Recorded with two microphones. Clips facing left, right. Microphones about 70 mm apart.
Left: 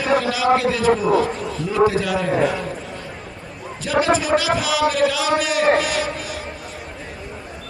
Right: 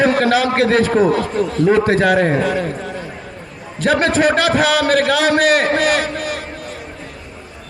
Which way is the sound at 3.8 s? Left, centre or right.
Right.